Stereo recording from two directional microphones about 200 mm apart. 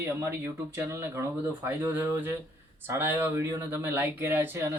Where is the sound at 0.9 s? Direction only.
10° right (ahead or behind).